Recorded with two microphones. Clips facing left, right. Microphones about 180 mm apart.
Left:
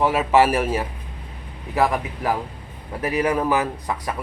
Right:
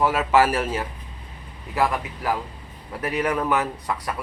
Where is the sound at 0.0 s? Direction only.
15° left (ahead or behind).